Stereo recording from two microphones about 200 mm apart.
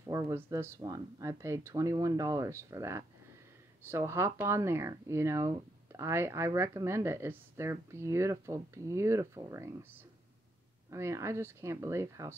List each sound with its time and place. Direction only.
0.1 s speech: 15° right (ahead or behind)
10.9 s speech: 15° right (ahead or behind)